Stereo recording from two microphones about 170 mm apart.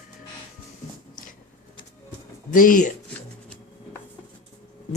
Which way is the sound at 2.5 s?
55° left (ahead or behind).